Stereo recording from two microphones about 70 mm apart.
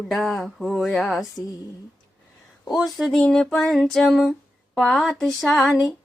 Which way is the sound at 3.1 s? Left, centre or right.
Centre.